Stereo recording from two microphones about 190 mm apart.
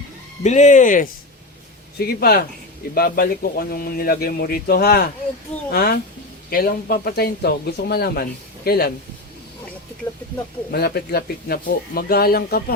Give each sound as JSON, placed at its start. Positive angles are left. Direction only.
{"t": 0.4, "sound": "speech", "side_deg": 40}
{"t": 2.0, "sound": "speech", "side_deg": 55}
{"t": 10.7, "sound": "speech", "side_deg": 55}